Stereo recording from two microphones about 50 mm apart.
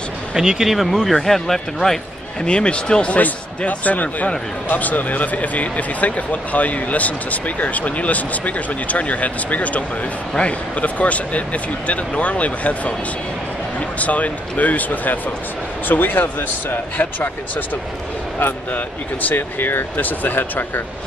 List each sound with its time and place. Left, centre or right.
0.3 s speech: centre
2.4 s speech: centre
3.2 s speech: left
19.2 s speech: left